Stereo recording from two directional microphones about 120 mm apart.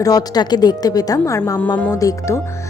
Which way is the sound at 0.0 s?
30° left (ahead or behind).